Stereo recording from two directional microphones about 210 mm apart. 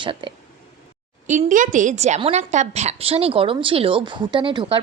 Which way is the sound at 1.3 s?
40° right (ahead or behind).